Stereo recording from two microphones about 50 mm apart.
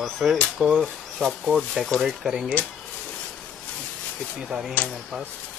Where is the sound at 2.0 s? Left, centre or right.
Centre.